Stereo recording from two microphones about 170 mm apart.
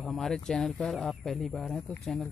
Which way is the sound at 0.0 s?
Centre (ahead or behind).